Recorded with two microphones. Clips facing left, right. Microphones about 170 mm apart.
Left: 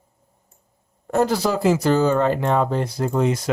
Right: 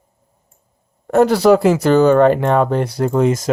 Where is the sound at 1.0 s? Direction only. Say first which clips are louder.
Right 8 dB; 65° right (ahead or behind).